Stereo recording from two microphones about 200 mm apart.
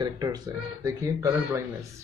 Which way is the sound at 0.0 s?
20° right (ahead or behind).